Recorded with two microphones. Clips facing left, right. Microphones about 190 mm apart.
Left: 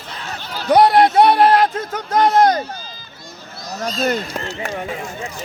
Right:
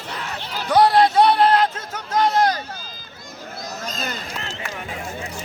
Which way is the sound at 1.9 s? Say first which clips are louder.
Left 4 dB; 40° left (ahead or behind).